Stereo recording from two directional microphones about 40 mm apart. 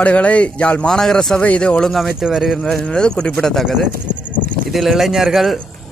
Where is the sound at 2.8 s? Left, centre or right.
Left.